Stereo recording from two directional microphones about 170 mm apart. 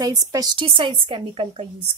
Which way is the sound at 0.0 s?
20° right (ahead or behind).